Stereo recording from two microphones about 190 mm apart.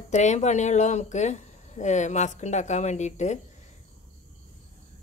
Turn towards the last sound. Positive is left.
turn(degrees=40)  # may be behind; listen again after turning